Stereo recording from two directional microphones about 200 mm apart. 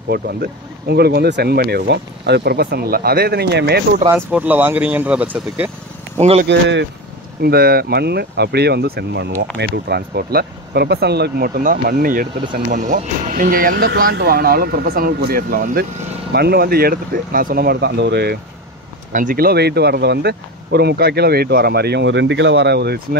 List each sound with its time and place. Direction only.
0.1 s speech: 50° right (ahead or behind)
4.1 s speech: 10° right (ahead or behind)
6.1 s speech: 30° right (ahead or behind)
6.4 s speech: 60° right (ahead or behind)
19.1 s speech: 45° right (ahead or behind)